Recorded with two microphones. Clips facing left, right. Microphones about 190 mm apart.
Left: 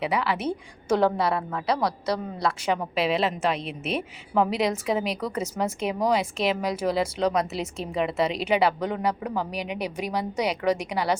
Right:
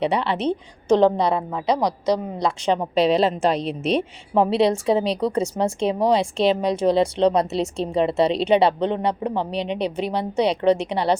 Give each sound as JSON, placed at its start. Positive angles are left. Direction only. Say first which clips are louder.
{"t": 0.0, "sound": "speech", "louder": "right 4 dB", "side_deg": -30}
{"t": 0.3, "sound": "a woman's voice", "louder": "right 6 dB", "side_deg": 10}
{"t": 1.3, "sound": "a woman's voice", "louder": "right 4 dB", "side_deg": -15}
{"t": 3.1, "sound": "speech", "louder": "right 4 dB", "side_deg": -30}